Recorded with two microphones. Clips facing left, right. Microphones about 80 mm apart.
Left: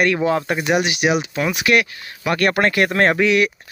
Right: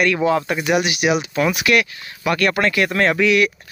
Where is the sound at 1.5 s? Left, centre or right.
Left.